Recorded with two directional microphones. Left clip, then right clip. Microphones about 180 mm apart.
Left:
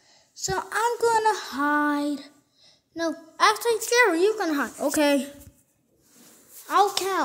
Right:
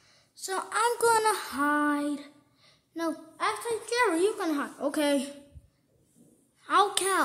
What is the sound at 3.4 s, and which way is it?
Speech, 45° left (ahead or behind).